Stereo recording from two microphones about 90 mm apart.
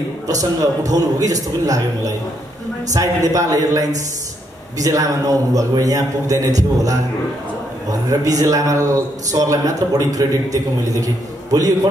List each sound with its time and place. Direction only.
0.3 s a man's voice: 40° right (ahead or behind)
8.1 s a man's voice: 40° right (ahead or behind)